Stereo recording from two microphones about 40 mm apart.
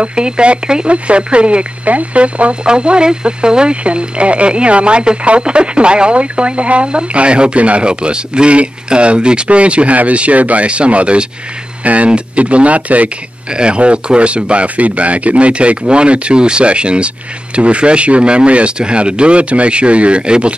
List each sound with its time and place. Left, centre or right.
0.0 s speech: right
13.5 s speech: right